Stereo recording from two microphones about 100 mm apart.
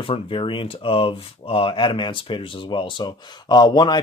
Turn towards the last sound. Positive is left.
turn(degrees=45)  # may be behind; listen again after turning